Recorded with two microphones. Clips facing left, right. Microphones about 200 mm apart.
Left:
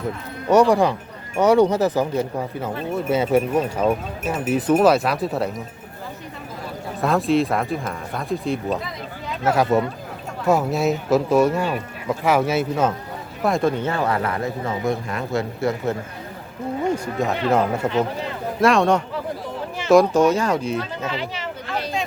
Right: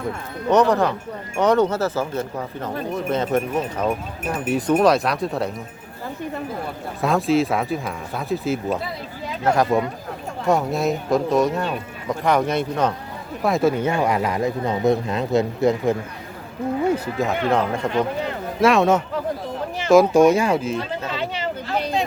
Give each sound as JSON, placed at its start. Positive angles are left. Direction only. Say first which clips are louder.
{"t": 0.5, "sound": "speech", "louder": "left 2 dB", "side_deg": 10}
{"t": 7.0, "sound": "speech", "louder": "even", "side_deg": 0}
{"t": 16.9, "sound": "speech", "louder": "right 1 dB", "side_deg": 0}